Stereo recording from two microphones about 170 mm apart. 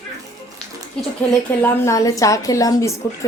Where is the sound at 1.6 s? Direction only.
20° left (ahead or behind).